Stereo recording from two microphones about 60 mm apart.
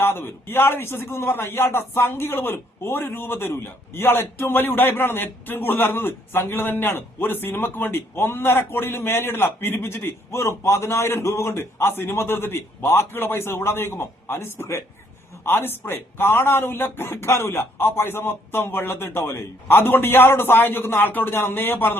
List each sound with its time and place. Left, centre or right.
0.0 s a man's voice: left